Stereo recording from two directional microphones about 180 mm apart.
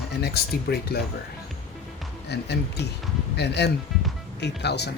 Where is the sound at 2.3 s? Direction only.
65° left (ahead or behind).